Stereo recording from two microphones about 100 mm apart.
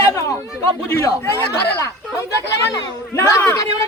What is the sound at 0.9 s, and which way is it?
Speech, 30° left (ahead or behind).